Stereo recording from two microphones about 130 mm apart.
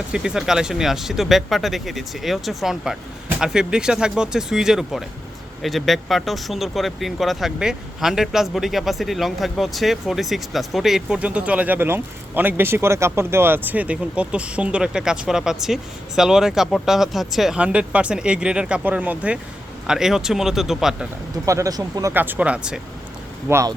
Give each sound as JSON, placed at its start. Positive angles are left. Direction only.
{"t": 0.1, "sound": "speech", "side_deg": -5}
{"t": 21.4, "sound": "speech", "side_deg": -25}
{"t": 22.1, "sound": "speech", "side_deg": -15}
{"t": 23.5, "sound": "speech", "side_deg": -20}